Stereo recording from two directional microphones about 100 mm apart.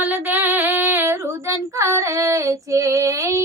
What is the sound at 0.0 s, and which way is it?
Female singing, 20° right (ahead or behind).